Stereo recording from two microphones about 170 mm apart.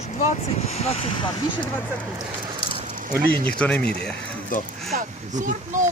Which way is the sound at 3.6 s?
5° left (ahead or behind).